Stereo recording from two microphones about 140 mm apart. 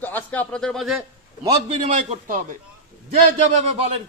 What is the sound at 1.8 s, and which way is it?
Speech, 70° right (ahead or behind).